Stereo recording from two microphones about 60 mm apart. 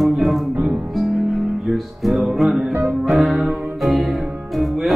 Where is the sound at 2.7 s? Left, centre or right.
Right.